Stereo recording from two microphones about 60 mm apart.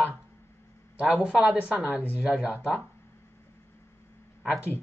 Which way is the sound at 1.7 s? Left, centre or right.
Right.